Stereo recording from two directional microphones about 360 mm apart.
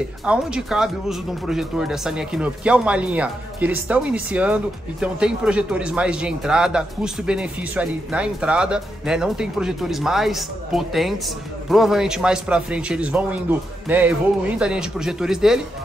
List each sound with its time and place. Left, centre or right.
0.2 s speech: centre